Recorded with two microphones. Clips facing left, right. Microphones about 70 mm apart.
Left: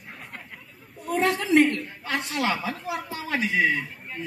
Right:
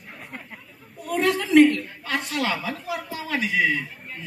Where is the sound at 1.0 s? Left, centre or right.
Left.